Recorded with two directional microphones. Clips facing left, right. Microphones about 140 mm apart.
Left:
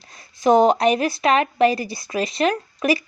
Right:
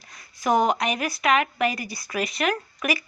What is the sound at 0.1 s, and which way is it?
Speech, 25° left (ahead or behind).